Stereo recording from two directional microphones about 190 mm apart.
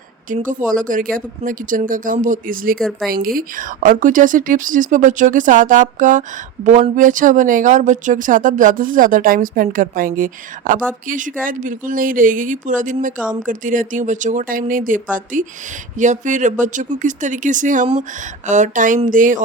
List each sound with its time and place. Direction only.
0.3 s speech: 45° right (ahead or behind)